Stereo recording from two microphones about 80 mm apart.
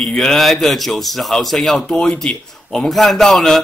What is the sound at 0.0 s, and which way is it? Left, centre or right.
A man's voice, centre.